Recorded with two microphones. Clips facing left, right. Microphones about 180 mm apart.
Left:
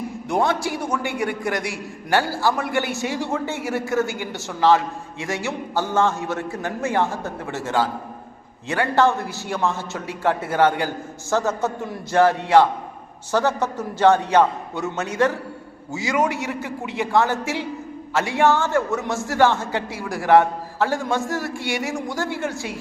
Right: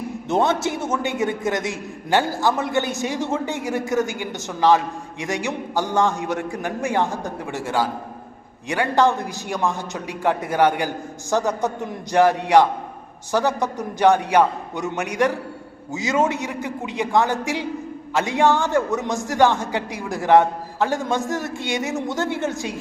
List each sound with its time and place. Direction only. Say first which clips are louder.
0.3 s a man's voice: right 2 dB; 20° right (ahead or behind)